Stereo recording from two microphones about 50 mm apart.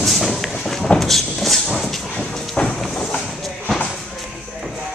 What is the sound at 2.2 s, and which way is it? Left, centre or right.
Train, centre.